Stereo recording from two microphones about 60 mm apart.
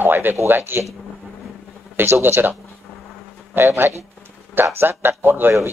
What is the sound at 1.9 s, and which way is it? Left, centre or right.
Speech, right.